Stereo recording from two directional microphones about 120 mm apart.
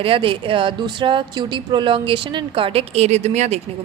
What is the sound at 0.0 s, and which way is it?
Speech, 50° right (ahead or behind).